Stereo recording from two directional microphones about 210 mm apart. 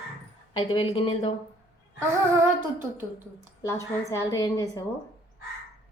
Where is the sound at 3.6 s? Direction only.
15° left (ahead or behind).